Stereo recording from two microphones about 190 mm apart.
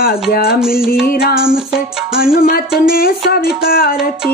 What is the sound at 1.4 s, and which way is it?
Music, 5° right (ahead or behind).